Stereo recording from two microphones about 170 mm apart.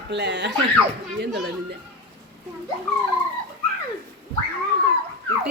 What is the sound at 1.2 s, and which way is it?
Speech, 75° right (ahead or behind).